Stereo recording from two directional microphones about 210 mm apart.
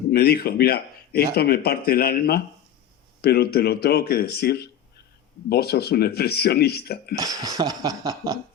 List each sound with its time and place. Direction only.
0.1 s speech: 50° left (ahead or behind)
7.2 s speech: 15° right (ahead or behind)